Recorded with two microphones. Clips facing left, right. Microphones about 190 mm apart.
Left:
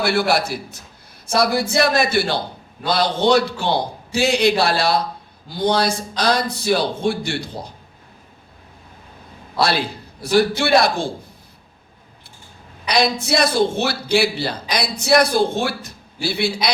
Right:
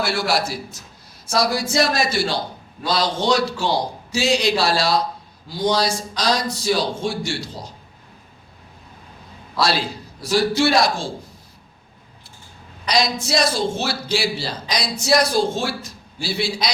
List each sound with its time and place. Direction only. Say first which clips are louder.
0.0 s speech: left 3 dB; 60° left (ahead or behind)
9.6 s speech: left 1 dB; 60° left (ahead or behind)
12.9 s speech: left 2 dB; 60° left (ahead or behind)